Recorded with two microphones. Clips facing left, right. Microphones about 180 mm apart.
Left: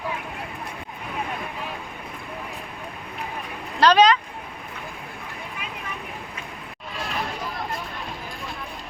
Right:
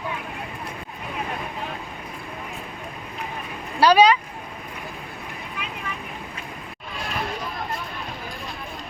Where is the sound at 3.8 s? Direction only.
10° right (ahead or behind).